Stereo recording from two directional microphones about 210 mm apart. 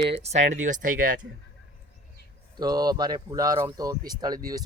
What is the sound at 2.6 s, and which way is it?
Speech, 20° right (ahead or behind).